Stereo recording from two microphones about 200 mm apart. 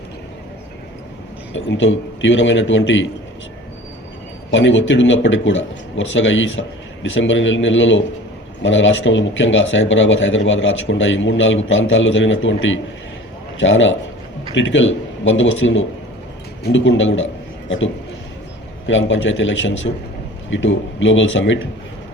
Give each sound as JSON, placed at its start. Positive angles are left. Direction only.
{"t": 1.5, "sound": "speech", "side_deg": 70}
{"t": 4.5, "sound": "a man's voice", "side_deg": 70}